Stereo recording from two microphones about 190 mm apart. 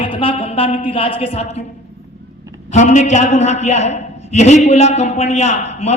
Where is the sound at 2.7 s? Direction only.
40° left (ahead or behind).